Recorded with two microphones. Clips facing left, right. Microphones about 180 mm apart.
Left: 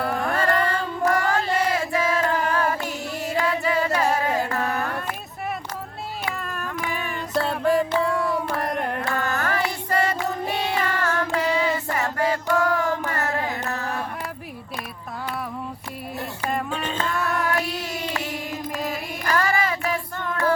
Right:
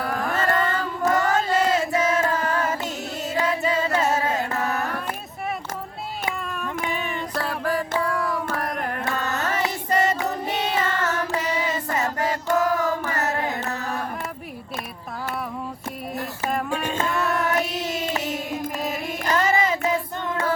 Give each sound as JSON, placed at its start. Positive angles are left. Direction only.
{"t": 0.0, "sound": "music", "side_deg": 0}
{"t": 0.3, "sound": "music", "side_deg": -20}
{"t": 4.4, "sound": "carnatic music", "side_deg": -20}
{"t": 6.4, "sound": "a sound", "side_deg": 0}
{"t": 7.6, "sound": "music", "side_deg": 25}
{"t": 8.0, "sound": "a sound", "side_deg": 25}
{"t": 8.5, "sound": "carnatic music", "side_deg": 0}
{"t": 9.0, "sound": "music", "side_deg": -20}
{"t": 12.5, "sound": "carnatic music", "side_deg": -20}
{"t": 16.5, "sound": "music", "side_deg": -5}
{"t": 17.0, "sound": "a sound", "side_deg": -20}
{"t": 18.9, "sound": "female singing", "side_deg": -20}